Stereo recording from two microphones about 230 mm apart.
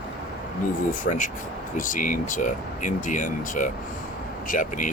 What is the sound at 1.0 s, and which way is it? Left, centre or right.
Speech, left.